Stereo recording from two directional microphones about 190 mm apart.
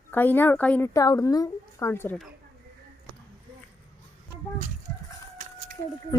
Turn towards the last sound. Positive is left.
turn(degrees=-45)  # may be behind; listen again after turning